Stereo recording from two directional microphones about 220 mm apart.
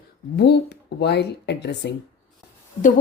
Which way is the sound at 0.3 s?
50° left (ahead or behind).